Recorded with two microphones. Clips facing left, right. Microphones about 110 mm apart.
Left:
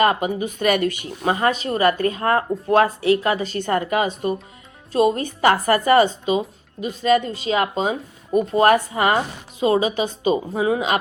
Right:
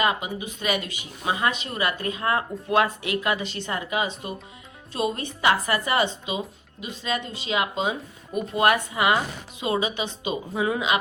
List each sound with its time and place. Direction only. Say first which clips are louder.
0.0 s speech: left 7 dB; 50° left (ahead or behind)
1.2 s speech: left 5 dB; 40° left (ahead or behind)
4.9 s speech: left 9 dB; 40° left (ahead or behind)